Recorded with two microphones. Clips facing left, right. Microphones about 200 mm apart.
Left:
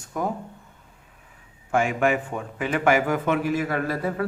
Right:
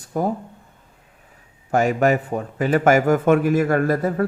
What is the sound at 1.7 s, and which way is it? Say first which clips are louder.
A man's voice: right 4 dB; 40° right (ahead or behind).